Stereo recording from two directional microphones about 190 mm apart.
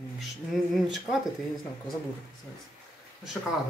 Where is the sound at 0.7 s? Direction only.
Centre (ahead or behind).